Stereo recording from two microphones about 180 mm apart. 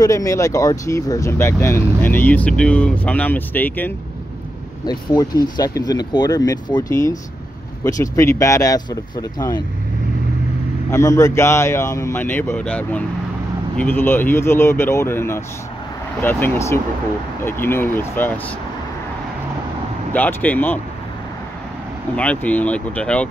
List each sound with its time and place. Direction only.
0.0 s speech: 20° left (ahead or behind)
4.8 s speech: 20° left (ahead or behind)
10.9 s speech: 15° left (ahead or behind)
20.1 s speech: 10° left (ahead or behind)
22.1 s speech: 5° left (ahead or behind)